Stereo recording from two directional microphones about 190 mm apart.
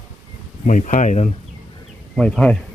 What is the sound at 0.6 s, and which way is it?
Speech, 45° left (ahead or behind).